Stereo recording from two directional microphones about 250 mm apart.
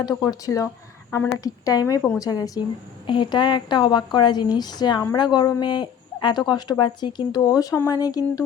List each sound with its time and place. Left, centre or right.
0.0 s a woman's voice: centre